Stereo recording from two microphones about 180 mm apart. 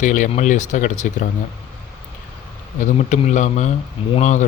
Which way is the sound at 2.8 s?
40° left (ahead or behind).